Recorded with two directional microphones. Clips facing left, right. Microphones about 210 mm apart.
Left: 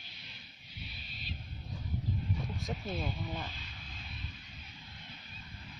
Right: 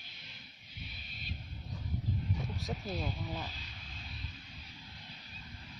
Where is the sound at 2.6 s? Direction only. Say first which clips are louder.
Even; centre (ahead or behind).